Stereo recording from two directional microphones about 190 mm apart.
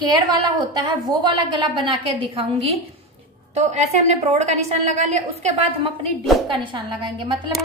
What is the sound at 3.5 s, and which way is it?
A woman's voice, 35° right (ahead or behind).